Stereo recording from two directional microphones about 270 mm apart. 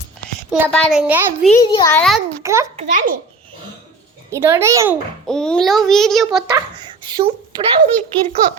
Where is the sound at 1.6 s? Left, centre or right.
Centre.